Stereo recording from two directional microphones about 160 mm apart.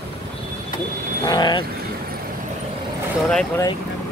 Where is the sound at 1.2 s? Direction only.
30° left (ahead or behind).